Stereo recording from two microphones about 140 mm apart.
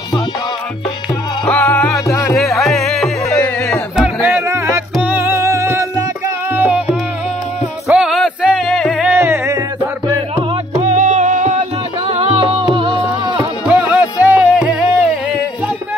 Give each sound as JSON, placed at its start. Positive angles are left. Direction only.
{"t": 1.4, "sound": "music", "side_deg": 10}
{"t": 2.3, "sound": "music", "side_deg": 0}
{"t": 9.0, "sound": "music", "side_deg": -15}
{"t": 10.8, "sound": "music", "side_deg": -60}
{"t": 12.1, "sound": "music", "side_deg": -45}
{"t": 13.7, "sound": "music", "side_deg": -10}